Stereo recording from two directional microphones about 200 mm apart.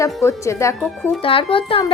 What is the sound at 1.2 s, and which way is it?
Speech, 25° left (ahead or behind).